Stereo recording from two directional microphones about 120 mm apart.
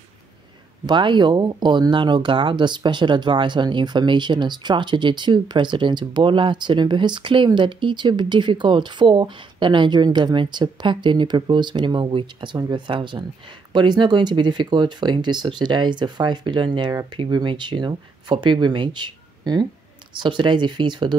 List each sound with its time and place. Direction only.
0.8 s speech: 40° right (ahead or behind)